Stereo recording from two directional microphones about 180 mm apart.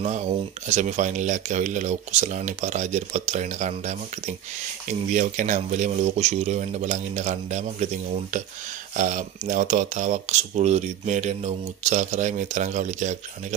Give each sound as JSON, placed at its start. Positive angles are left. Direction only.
{"t": 0.7, "sound": "speech", "side_deg": -40}